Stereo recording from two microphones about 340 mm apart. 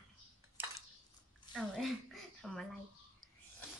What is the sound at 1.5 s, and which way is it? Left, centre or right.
A woman's voice, centre.